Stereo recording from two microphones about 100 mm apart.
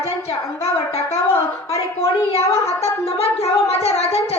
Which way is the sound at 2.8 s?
90° left.